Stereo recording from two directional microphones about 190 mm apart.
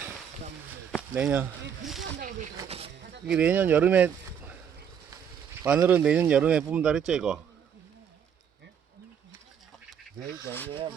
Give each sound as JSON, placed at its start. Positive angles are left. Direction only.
{"t": 1.1, "sound": "speech", "side_deg": -5}
{"t": 2.6, "sound": "insect", "side_deg": -30}
{"t": 3.2, "sound": "speech", "side_deg": -5}
{"t": 5.6, "sound": "a man's voice", "side_deg": -5}